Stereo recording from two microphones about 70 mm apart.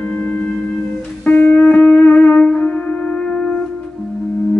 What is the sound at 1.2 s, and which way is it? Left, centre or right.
Music, left.